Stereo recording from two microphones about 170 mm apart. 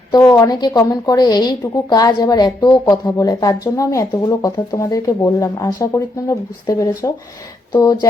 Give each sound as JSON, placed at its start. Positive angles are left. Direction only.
{"t": 0.1, "sound": "a woman's voice", "side_deg": 20}